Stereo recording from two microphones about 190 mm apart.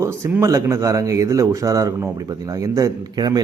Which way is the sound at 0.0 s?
15° right (ahead or behind).